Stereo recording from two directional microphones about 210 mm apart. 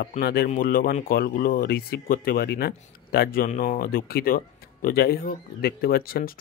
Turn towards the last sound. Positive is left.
turn(degrees=45)  # may be behind; listen again after turning